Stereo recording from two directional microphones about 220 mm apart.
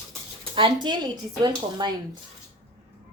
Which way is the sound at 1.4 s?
20° right (ahead or behind).